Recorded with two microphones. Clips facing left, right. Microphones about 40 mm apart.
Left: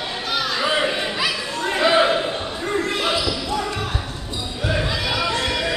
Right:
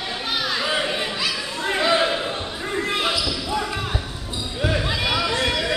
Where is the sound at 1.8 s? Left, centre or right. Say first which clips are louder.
Left 4 dB; centre.